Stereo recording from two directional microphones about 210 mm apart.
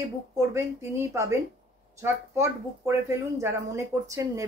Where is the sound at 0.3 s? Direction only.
15° right (ahead or behind).